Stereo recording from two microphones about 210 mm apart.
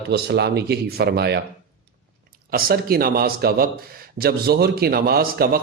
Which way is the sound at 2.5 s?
45° right (ahead or behind).